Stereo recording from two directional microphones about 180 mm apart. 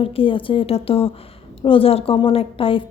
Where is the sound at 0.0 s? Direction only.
30° left (ahead or behind).